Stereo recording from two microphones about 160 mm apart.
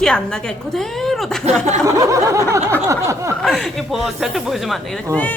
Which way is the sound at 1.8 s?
20° right (ahead or behind).